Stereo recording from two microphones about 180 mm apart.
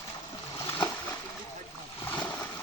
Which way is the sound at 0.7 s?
10° left (ahead or behind).